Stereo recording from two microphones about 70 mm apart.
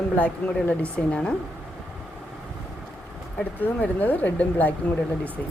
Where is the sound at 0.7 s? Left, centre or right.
Centre.